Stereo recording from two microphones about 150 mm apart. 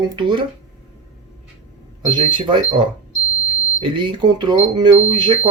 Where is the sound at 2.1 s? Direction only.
30° right (ahead or behind).